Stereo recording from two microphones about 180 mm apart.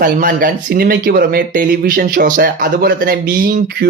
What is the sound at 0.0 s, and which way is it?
A man's voice, 50° right (ahead or behind).